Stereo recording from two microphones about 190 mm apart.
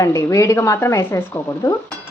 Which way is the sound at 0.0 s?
15° left (ahead or behind).